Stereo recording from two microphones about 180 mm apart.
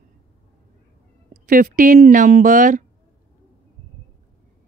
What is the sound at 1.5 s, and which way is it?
Speech, 50° right (ahead or behind).